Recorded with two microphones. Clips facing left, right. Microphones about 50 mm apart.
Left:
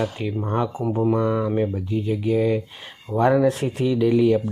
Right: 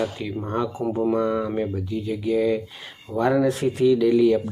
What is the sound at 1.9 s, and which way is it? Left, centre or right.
Speech, left.